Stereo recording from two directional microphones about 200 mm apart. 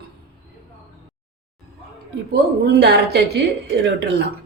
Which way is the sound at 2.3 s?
55° right (ahead or behind).